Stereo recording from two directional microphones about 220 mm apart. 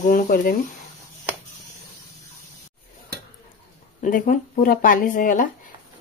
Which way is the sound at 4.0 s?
35° left (ahead or behind).